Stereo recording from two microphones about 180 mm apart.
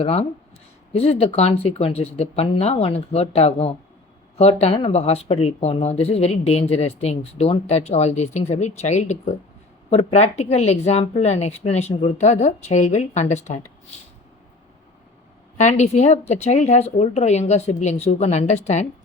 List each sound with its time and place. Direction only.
0.0 s speech: 35° left (ahead or behind)
15.5 s speech: 40° left (ahead or behind)